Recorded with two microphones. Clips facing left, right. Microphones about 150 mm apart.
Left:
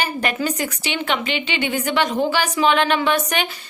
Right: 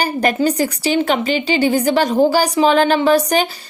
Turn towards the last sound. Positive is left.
turn(degrees=-35)  # may be behind; listen again after turning